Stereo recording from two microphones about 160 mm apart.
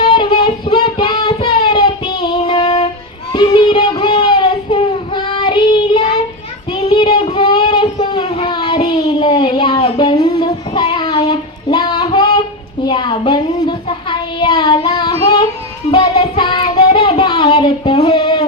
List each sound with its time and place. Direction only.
0.0 s child singing: 30° left (ahead or behind)